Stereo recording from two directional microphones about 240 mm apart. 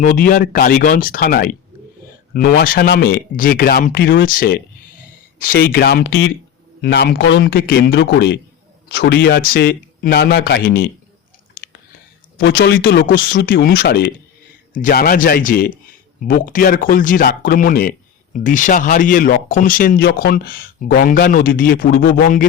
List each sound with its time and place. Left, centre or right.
0.0 s a man's voice: left
12.4 s speech: left